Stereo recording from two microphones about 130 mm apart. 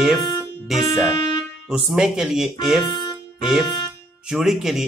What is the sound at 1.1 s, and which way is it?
Music, 35° left (ahead or behind).